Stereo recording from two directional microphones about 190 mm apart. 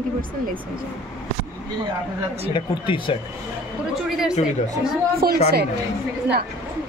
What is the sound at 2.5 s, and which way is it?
Speech, 25° left (ahead or behind).